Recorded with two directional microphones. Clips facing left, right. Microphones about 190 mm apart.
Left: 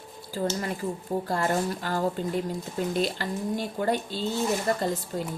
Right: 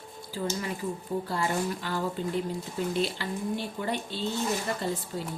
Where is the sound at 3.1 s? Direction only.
45° left (ahead or behind).